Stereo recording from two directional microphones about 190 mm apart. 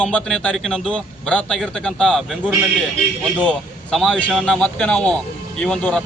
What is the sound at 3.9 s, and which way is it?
Speech, 5° left (ahead or behind).